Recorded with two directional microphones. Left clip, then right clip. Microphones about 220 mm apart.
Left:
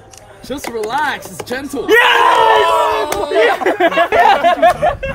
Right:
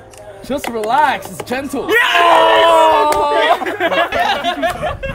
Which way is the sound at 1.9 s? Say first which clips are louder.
Left 2 dB; 25° left (ahead or behind).